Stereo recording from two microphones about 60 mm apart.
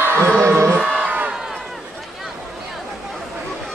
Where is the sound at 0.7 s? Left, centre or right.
Right.